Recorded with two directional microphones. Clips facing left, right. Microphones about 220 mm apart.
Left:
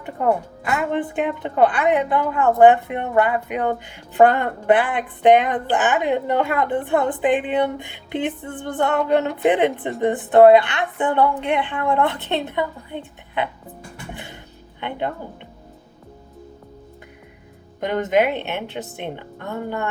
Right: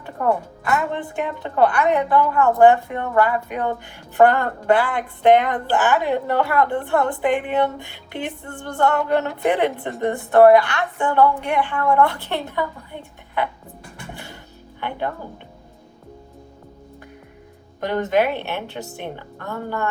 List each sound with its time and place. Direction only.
0.0 s a woman's voice: 20° left (ahead or behind)
6.8 s female singing: 20° left (ahead or behind)
10.0 s a woman's voice: 20° left (ahead or behind)
14.8 s speech: 20° left (ahead or behind)
17.7 s a woman's voice: 20° left (ahead or behind)